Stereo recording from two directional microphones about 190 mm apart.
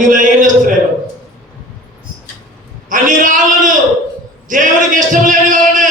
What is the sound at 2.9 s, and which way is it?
A man's voice, 45° right (ahead or behind).